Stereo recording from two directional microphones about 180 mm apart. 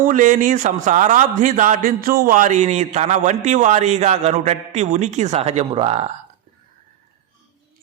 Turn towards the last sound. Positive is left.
turn(degrees=-35)  # may be behind; listen again after turning